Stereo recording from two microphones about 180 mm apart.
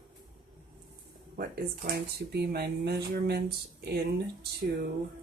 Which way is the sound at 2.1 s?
60° right (ahead or behind).